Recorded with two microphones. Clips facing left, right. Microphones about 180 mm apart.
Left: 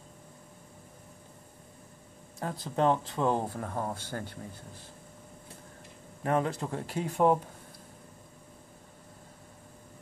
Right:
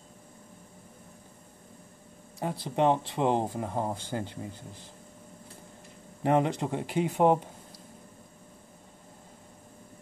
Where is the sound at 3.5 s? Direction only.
20° right (ahead or behind).